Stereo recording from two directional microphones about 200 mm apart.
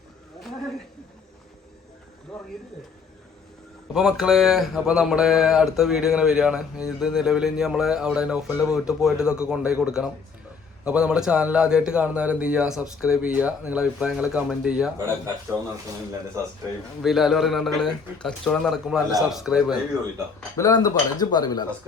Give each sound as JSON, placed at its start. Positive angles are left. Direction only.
{"t": 2.3, "sound": "a sound", "side_deg": 5}
{"t": 3.9, "sound": "speech", "side_deg": 0}
{"t": 14.9, "sound": "a man's voice", "side_deg": -15}
{"t": 17.0, "sound": "speech", "side_deg": 0}
{"t": 20.6, "sound": "speech", "side_deg": 15}